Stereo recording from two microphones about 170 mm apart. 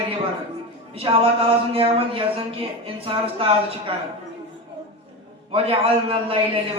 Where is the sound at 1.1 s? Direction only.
25° right (ahead or behind).